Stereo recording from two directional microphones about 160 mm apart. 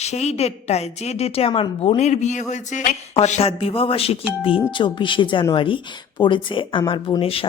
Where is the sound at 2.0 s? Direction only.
45° left (ahead or behind).